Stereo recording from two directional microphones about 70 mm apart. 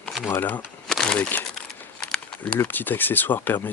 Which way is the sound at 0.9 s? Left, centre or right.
Centre.